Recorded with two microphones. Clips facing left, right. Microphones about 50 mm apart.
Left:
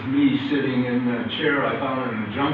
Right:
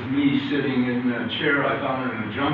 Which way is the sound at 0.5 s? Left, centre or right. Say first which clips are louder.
Left 1 dB; centre.